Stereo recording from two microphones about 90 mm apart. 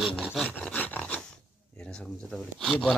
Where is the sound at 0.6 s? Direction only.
15° left (ahead or behind).